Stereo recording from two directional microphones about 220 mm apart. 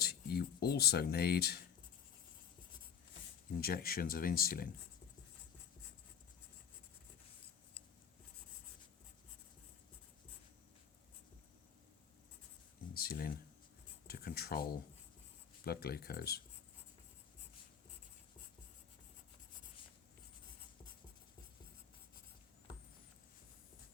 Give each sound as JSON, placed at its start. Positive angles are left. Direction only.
{"t": 0.0, "sound": "speech", "side_deg": 45}
{"t": 3.6, "sound": "speech", "side_deg": 40}
{"t": 12.9, "sound": "a sound", "side_deg": 40}
{"t": 14.1, "sound": "speech", "side_deg": 45}